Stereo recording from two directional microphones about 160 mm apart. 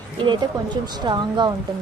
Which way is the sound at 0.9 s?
25° right (ahead or behind).